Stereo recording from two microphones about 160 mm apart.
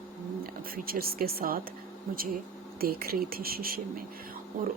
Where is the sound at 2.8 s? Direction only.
70° right (ahead or behind).